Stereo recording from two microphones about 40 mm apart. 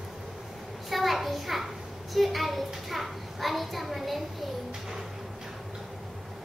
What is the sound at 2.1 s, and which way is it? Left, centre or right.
A child's voice, centre.